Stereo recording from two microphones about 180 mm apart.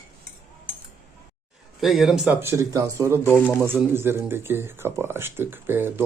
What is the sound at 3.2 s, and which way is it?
Speech, 10° left (ahead or behind).